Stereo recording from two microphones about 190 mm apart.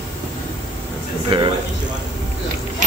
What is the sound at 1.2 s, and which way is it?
Speech, 25° right (ahead or behind).